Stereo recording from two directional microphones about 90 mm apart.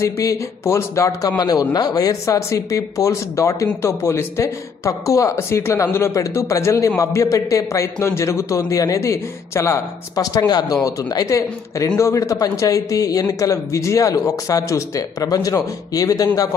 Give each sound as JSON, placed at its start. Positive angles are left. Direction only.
{"t": 0.0, "sound": "speech", "side_deg": 35}